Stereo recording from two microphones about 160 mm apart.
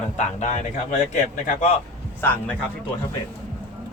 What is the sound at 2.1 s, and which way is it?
Speech, 10° left (ahead or behind).